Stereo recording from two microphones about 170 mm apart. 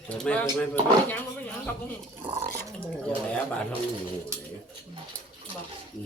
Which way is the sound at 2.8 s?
5° left (ahead or behind).